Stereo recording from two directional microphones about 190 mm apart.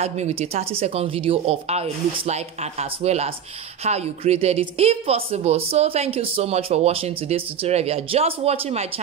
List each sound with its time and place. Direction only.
0.0 s a woman's voice: 35° right (ahead or behind)